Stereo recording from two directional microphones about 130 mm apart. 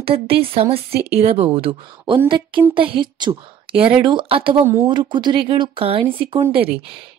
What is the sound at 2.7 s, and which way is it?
A woman's voice, 40° right (ahead or behind).